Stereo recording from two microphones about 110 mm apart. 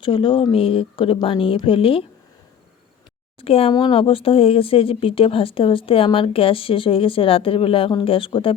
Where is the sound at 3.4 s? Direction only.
60° left (ahead or behind).